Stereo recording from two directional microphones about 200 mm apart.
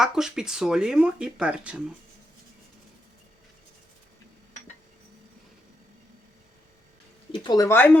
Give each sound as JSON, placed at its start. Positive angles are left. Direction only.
{"t": 0.0, "sound": "speech", "side_deg": 0}
{"t": 7.3, "sound": "speech", "side_deg": 20}